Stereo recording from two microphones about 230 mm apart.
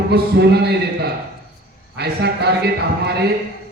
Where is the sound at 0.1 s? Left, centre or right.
Right.